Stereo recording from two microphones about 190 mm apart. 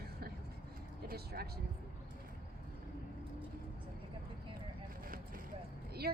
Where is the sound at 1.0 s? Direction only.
55° right (ahead or behind).